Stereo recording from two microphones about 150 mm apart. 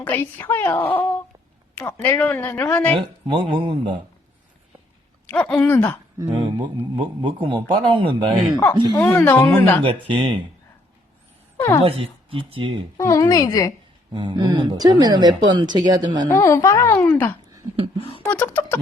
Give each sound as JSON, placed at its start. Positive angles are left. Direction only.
{"t": 0.0, "sound": "a woman's voice", "side_deg": 15}
{"t": 2.9, "sound": "a man's voice", "side_deg": -35}
{"t": 5.2, "sound": "a woman's voice", "side_deg": 10}
{"t": 6.1, "sound": "a man's voice", "side_deg": -25}
{"t": 8.5, "sound": "a woman's voice", "side_deg": 15}
{"t": 9.8, "sound": "a man's voice", "side_deg": -40}
{"t": 11.5, "sound": "a sound", "side_deg": 15}
{"t": 11.8, "sound": "a man's voice", "side_deg": -40}
{"t": 13.0, "sound": "a woman's voice", "side_deg": 20}
{"t": 14.1, "sound": "speech", "side_deg": -35}
{"t": 16.3, "sound": "a woman's voice", "side_deg": 20}